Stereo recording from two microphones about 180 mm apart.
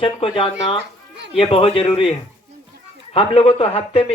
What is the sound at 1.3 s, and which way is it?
Speech, 30° left (ahead or behind).